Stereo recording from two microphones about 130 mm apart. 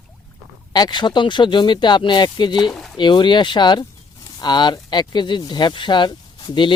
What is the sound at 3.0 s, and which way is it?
Speech, 35° left (ahead or behind).